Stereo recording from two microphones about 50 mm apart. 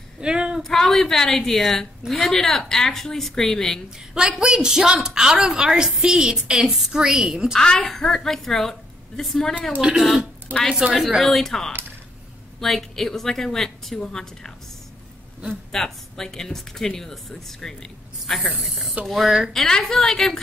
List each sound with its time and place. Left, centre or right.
0.2 s a sound: centre
0.7 s a woman's voice: centre
4.1 s a woman's voice: centre
7.6 s a woman's voice: centre
9.8 s a woman's voice: centre
11.2 s a woman's voice: centre
15.7 s a woman's voice: centre